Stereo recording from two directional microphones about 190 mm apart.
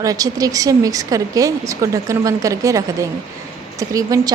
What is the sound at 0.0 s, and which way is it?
A woman's voice, 20° right (ahead or behind).